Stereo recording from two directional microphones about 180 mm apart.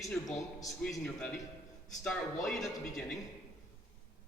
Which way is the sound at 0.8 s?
5° left (ahead or behind).